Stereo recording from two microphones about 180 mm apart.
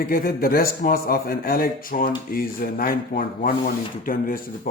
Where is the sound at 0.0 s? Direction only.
55° left (ahead or behind).